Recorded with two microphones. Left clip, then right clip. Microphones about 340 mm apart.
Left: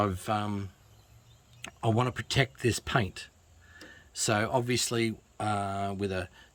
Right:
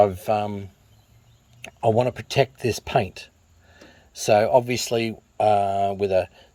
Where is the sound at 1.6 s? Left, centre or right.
Centre.